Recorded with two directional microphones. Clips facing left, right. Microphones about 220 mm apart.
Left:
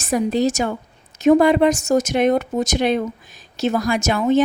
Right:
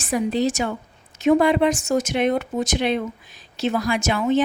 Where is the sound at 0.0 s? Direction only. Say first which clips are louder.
Left 3 dB; 45° left (ahead or behind).